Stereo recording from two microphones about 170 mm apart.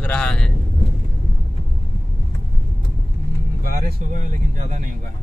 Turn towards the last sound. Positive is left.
turn(degrees=-45)  # may be behind; listen again after turning